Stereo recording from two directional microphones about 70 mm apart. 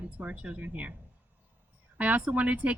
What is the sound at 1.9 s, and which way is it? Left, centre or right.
Speech, centre.